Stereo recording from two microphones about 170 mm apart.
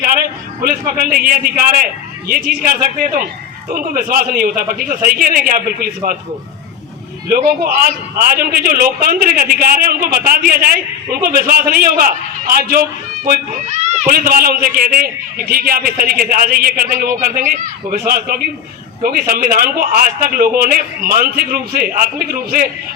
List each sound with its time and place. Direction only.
0.0 s a sound: 55° right (ahead or behind)
1.1 s a man's voice: 55° right (ahead or behind)
7.3 s a man's voice: 55° right (ahead or behind)
13.2 s a man's voice: 60° right (ahead or behind)
13.7 s a child's voice: 40° right (ahead or behind)
14.1 s a man's voice: 60° right (ahead or behind)